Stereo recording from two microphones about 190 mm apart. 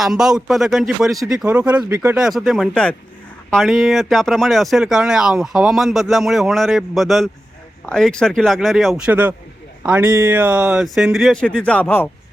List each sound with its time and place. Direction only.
0.0 s speech: centre (ahead or behind)
1.1 s speech: 15° right (ahead or behind)
1.4 s speech: 5° right (ahead or behind); by 12.0 s 10° left (ahead or behind)